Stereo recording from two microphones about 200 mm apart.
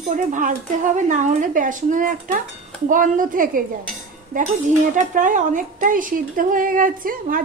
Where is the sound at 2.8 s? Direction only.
40° right (ahead or behind).